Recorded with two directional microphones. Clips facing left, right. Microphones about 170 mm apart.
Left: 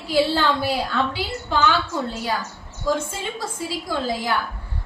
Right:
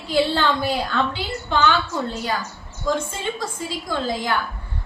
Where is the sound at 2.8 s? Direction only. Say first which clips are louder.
Even; 5° left (ahead or behind).